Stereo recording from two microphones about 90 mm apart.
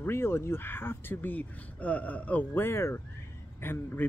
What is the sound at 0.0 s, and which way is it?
Speech, 25° left (ahead or behind).